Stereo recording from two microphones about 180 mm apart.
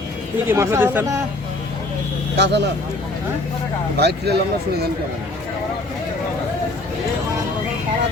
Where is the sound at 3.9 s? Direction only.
65° right (ahead or behind).